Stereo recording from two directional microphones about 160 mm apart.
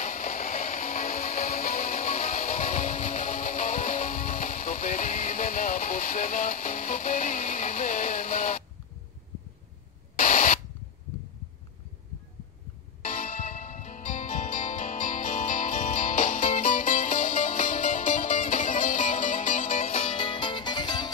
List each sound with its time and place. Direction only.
0.0 s music: 55° left (ahead or behind)
10.1 s a sound: 55° left (ahead or behind)
13.0 s music: 55° left (ahead or behind); by 21.1 s 25° left (ahead or behind)